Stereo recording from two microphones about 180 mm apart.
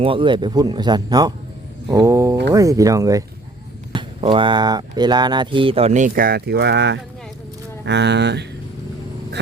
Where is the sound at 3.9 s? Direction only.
30° right (ahead or behind); by 8.5 s 70° right (ahead or behind).